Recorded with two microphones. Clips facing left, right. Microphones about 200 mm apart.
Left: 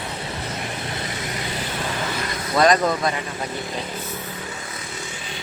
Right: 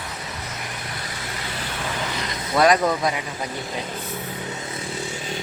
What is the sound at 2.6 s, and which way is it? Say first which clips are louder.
Speech: even; 10° right (ahead or behind).